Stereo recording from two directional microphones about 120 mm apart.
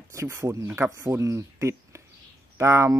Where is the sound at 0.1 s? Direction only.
20° right (ahead or behind).